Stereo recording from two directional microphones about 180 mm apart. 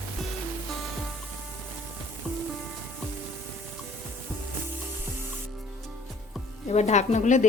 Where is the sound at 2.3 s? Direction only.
10° right (ahead or behind).